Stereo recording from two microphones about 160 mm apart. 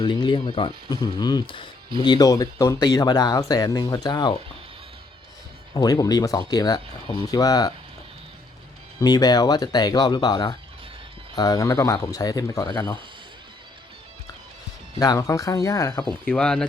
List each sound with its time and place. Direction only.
0.0 s speech: 30° left (ahead or behind)
5.7 s speech: 25° left (ahead or behind)
9.0 s speech: 25° left (ahead or behind)
14.9 s speech: 20° left (ahead or behind)
16.2 s speech: 5° left (ahead or behind)